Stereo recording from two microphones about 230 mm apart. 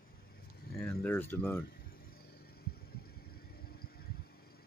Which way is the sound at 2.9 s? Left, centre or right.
Left.